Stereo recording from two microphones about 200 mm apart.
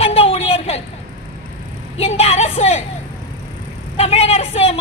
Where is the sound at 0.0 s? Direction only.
30° left (ahead or behind).